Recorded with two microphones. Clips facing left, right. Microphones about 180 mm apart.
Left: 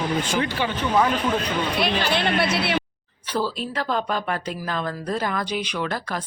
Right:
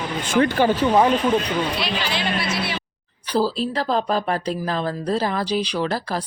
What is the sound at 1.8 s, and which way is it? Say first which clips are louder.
Speech: left 3 dB; 55° left (ahead or behind).